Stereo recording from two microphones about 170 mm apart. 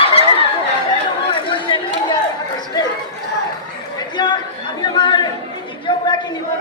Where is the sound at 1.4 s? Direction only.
30° left (ahead or behind).